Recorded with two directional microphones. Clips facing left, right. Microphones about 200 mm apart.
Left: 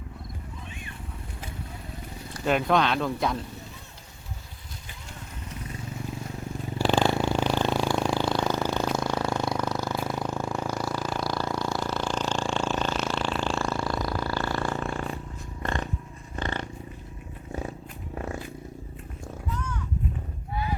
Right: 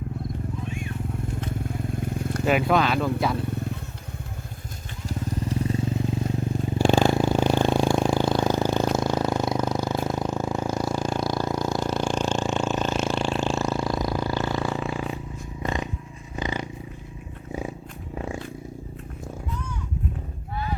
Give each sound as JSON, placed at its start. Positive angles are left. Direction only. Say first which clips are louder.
{"t": 0.7, "sound": "vehicle", "louder": "right 10 dB", "side_deg": 0}
{"t": 2.0, "sound": "wild animals", "louder": "right 11 dB", "side_deg": -50}
{"t": 2.4, "sound": "speech", "louder": "right 2 dB", "side_deg": -5}
{"t": 5.0, "sound": "vehicle", "louder": "right 15 dB", "side_deg": -35}
{"t": 6.7, "sound": "a sound", "louder": "right 3 dB", "side_deg": -15}
{"t": 9.7, "sound": "purr", "louder": "right 4 dB", "side_deg": -15}
{"t": 13.1, "sound": "a sound", "louder": "right 3 dB", "side_deg": -15}
{"t": 14.7, "sound": "roar", "louder": "right 2 dB", "side_deg": -5}
{"t": 15.6, "sound": "purr", "louder": "right 2 dB", "side_deg": -10}
{"t": 18.1, "sound": "purr", "louder": "right 2 dB", "side_deg": -10}